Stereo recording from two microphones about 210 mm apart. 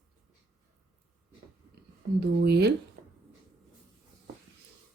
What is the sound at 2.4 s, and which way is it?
Speech, 50° right (ahead or behind).